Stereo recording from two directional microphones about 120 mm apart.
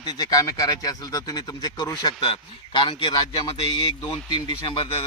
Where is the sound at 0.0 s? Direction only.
35° left (ahead or behind).